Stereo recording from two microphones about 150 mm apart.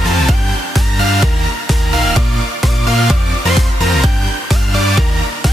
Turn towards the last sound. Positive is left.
turn(degrees=0)  # may be behind; listen again after turning